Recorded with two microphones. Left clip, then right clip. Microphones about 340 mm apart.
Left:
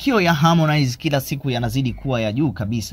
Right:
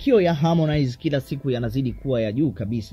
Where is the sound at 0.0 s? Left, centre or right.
Centre.